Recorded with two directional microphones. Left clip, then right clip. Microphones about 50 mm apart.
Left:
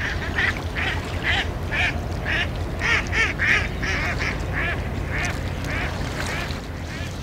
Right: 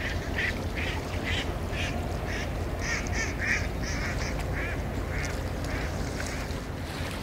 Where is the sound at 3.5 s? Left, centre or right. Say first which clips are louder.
Left 9 dB; left.